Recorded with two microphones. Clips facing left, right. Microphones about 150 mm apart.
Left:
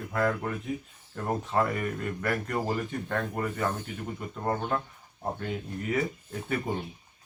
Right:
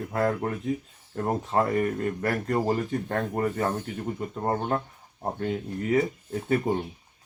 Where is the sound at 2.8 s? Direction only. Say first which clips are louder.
Right 3 dB; 40° right (ahead or behind).